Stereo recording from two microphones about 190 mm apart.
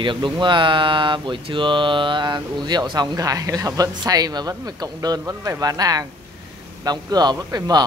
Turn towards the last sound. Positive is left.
turn(degrees=-20)  # may be behind; listen again after turning